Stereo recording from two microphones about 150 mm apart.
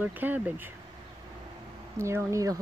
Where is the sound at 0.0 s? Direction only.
10° right (ahead or behind).